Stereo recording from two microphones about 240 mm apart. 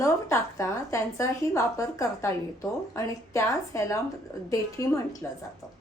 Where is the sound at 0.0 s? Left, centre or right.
Centre.